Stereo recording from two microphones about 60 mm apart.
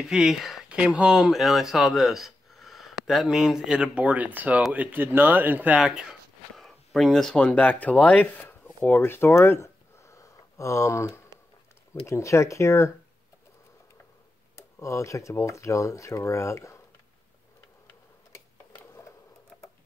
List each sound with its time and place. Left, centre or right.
0.0 s speech: centre
0.7 s speech: centre
5.8 s speech: centre
6.5 s a sound: centre
7.3 s speech: left
9.3 s a sound: left
12.1 s speech: left
14.5 s speech: left